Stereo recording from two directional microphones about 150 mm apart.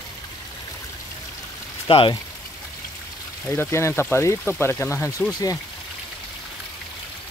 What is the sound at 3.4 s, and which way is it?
Speech, 15° left (ahead or behind).